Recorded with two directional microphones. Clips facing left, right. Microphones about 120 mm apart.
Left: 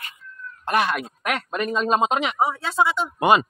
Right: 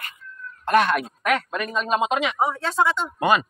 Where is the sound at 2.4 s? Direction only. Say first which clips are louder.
Even; 10° left (ahead or behind).